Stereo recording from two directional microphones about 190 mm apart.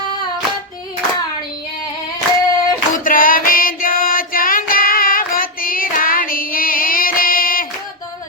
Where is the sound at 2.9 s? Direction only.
45° left (ahead or behind).